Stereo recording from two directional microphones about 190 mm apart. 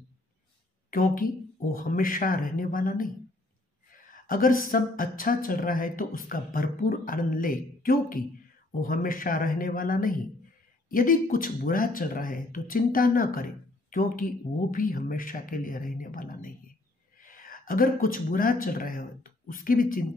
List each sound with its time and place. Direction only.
0.8 s speech: 45° left (ahead or behind)